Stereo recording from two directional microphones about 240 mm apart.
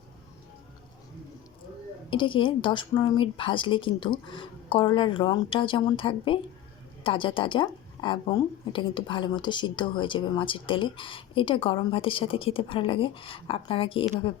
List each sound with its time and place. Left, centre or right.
2.0 s a woman's voice: left